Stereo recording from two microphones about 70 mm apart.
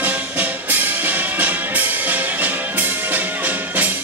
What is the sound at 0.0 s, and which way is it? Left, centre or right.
Music, right.